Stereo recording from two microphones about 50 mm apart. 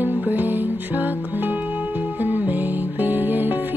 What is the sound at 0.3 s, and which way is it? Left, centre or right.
Music, right.